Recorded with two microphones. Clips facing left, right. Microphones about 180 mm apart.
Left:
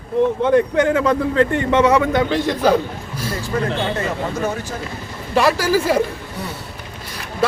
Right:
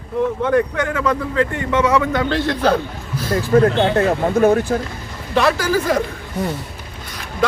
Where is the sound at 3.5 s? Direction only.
55° right (ahead or behind).